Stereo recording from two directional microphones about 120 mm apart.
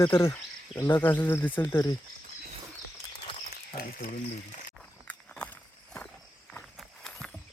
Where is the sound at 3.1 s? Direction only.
50° left (ahead or behind).